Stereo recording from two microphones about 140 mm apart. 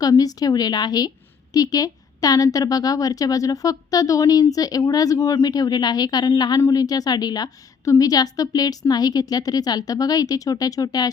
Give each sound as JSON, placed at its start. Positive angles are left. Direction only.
{"t": 0.0, "sound": "a woman's voice", "side_deg": 25}